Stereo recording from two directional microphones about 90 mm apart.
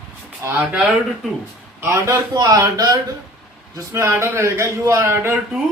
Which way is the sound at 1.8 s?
30° right (ahead or behind).